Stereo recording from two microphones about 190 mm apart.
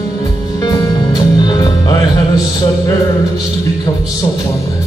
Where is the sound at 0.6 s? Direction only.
20° left (ahead or behind).